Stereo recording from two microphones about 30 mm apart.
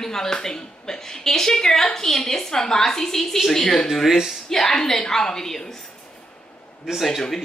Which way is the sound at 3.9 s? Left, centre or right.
Centre.